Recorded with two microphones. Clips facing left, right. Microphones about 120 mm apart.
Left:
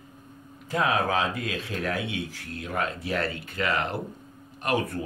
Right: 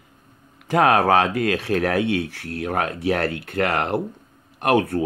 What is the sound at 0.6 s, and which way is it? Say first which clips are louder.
Speech: right 8 dB; 75° right (ahead or behind).